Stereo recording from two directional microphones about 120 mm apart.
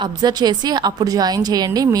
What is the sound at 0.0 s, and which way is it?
A woman's voice, 35° right (ahead or behind).